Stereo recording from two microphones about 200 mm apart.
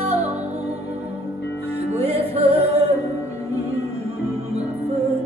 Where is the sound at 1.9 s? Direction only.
30° right (ahead or behind).